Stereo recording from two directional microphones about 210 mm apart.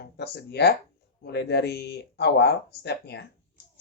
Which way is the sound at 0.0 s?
50° left (ahead or behind).